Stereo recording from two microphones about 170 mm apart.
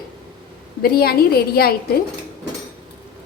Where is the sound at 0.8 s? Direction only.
65° left (ahead or behind).